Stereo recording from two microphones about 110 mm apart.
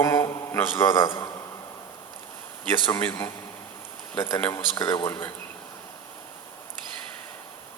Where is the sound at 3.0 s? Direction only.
20° left (ahead or behind).